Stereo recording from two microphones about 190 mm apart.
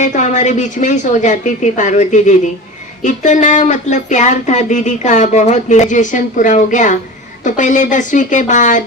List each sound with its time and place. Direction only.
0.0 s speech: 40° left (ahead or behind)